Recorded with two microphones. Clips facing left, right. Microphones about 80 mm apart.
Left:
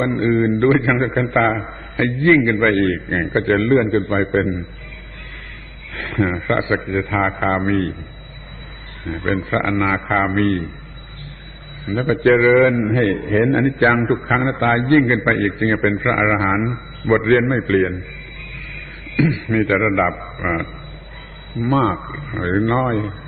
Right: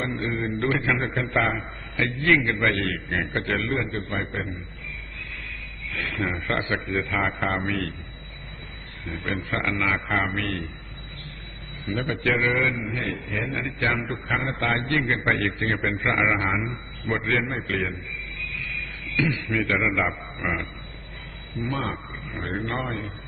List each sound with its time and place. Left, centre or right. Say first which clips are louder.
0.0 s a man's voice: left 11 dB; left
1.6 s a man's voice: left 7 dB; left
5.9 s a man's voice: left 8 dB; left
9.0 s a man's voice: left 8 dB; left
11.9 s a man's voice: left 10 dB; left
14.6 s a man's voice: left 13 dB; left
19.5 s a man's voice: left 8 dB; left